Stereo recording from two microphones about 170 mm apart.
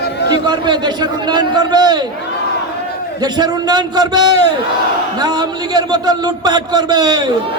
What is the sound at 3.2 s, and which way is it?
A man's voice, 25° right (ahead or behind).